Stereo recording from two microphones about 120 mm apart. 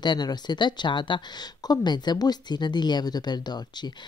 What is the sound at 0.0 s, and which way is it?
Speech, 35° left (ahead or behind).